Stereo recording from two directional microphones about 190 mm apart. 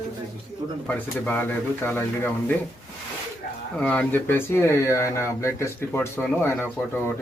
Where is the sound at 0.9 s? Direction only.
10° left (ahead or behind).